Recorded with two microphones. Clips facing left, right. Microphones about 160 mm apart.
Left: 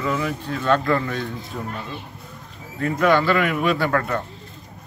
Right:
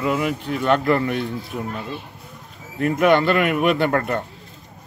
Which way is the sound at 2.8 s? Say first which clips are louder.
Right 2 dB; 20° right (ahead or behind).